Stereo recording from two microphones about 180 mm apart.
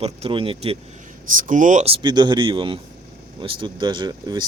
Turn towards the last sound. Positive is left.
turn(degrees=-25)  # may be behind; listen again after turning